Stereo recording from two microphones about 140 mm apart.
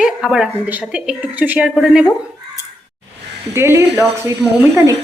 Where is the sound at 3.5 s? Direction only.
15° right (ahead or behind).